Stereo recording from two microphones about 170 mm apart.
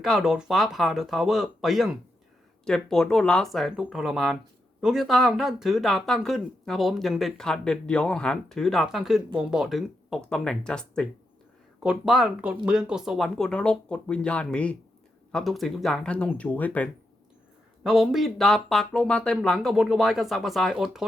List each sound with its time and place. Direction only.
0.0 s speech: centre (ahead or behind)
17.8 s speech: centre (ahead or behind)